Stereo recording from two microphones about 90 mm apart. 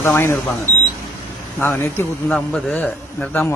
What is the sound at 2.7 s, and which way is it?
Speech, 15° left (ahead or behind).